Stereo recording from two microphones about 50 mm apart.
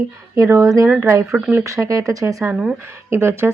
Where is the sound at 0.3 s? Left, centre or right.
Right.